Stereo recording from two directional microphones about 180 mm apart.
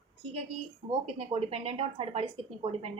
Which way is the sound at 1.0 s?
35° right (ahead or behind).